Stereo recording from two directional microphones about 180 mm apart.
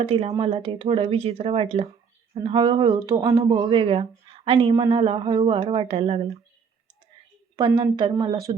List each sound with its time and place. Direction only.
0.0 s speech: 30° right (ahead or behind)
3.4 s speech: 30° right (ahead or behind)
7.5 s speech: 25° right (ahead or behind)